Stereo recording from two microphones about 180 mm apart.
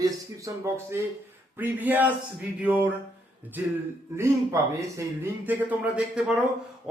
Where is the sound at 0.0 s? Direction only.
15° right (ahead or behind).